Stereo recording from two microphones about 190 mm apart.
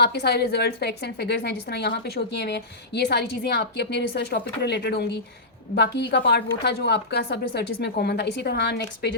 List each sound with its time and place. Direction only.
0.0 s a woman's voice: 60° left (ahead or behind)